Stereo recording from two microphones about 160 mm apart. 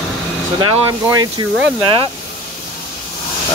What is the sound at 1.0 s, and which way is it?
Speech, 25° right (ahead or behind).